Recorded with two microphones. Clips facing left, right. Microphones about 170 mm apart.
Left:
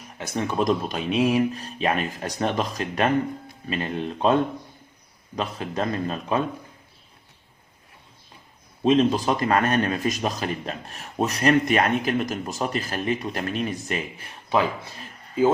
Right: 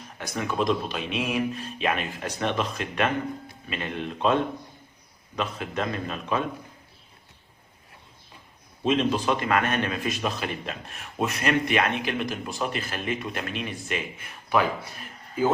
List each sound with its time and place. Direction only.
0.2 s speech: 30° left (ahead or behind)
5.4 s speech: 35° left (ahead or behind)
8.8 s speech: 40° left (ahead or behind)